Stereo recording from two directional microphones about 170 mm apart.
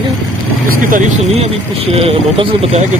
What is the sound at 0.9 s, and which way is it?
Speech, 40° right (ahead or behind).